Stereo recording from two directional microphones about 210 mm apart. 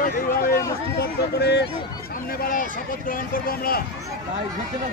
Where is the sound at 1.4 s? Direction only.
50° left (ahead or behind).